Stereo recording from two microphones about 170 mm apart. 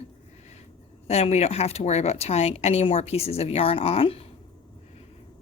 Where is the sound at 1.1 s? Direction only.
40° left (ahead or behind).